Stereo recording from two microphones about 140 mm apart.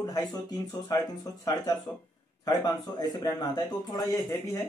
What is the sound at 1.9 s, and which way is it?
Speech, 10° left (ahead or behind).